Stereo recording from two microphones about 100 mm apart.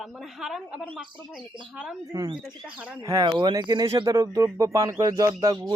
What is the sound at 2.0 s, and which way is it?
Speech, 35° right (ahead or behind).